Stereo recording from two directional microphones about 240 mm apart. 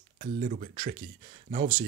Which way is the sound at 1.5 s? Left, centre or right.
Centre.